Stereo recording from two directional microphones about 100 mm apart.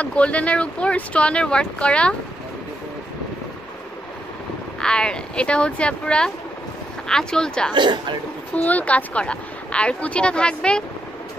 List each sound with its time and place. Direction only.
0.0 s speech: 15° left (ahead or behind)
4.7 s speech: 10° left (ahead or behind)
7.7 s speech: 50° right (ahead or behind)
8.5 s speech: 15° left (ahead or behind)